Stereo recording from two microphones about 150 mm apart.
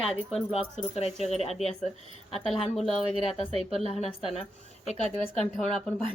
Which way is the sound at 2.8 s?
Centre (ahead or behind).